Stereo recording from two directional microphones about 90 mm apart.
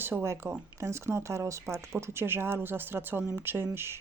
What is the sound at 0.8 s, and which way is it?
Speech, 30° right (ahead or behind).